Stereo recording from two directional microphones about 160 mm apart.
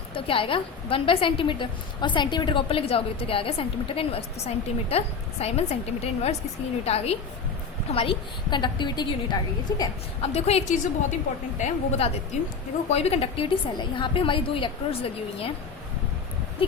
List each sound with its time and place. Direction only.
0.1 s a woman's voice: 35° left (ahead or behind)
10.2 s a woman's voice: 40° left (ahead or behind)